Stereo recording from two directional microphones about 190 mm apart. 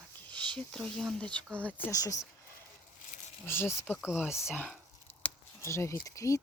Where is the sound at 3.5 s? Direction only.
10° left (ahead or behind).